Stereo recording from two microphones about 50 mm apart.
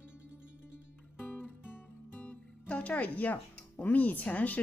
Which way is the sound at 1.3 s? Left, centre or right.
Left.